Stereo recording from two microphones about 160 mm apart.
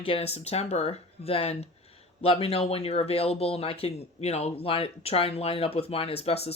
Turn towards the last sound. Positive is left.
turn(degrees=40)  # may be behind; listen again after turning